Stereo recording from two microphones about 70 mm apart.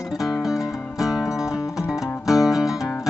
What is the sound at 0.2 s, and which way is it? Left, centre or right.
Music, centre.